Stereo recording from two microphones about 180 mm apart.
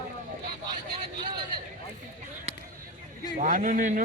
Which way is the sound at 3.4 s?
45° right (ahead or behind).